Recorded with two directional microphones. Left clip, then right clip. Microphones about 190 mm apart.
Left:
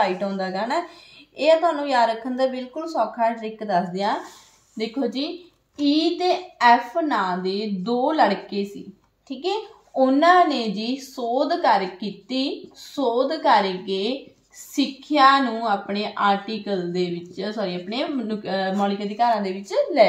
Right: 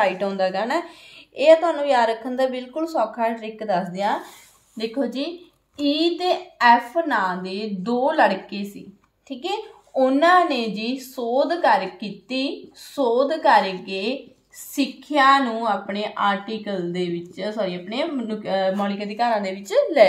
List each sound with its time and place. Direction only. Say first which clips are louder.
0.0 s a woman's voice: right 2 dB; 40° right (ahead or behind)